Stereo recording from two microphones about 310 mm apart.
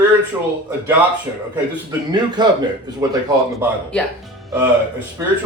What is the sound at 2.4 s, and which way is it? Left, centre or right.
Speech, centre.